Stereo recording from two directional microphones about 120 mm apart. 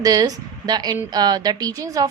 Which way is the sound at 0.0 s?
30° right (ahead or behind).